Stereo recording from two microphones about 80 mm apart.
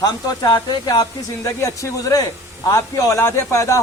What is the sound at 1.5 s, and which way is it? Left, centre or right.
A man's voice, left.